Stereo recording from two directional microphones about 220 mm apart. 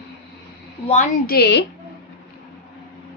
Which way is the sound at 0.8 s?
30° left (ahead or behind).